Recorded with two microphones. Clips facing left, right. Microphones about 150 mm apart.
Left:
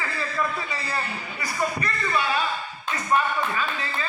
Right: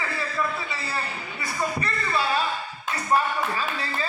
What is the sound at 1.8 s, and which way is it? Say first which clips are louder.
Speech: even; 30° right (ahead or behind).